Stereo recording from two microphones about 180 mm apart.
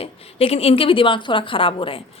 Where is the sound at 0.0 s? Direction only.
35° left (ahead or behind).